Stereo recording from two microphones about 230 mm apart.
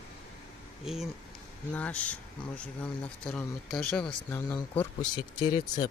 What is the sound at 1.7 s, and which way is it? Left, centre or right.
Speech, centre.